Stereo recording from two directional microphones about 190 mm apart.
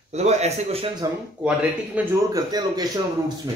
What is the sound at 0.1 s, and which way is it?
Speech, 35° right (ahead or behind).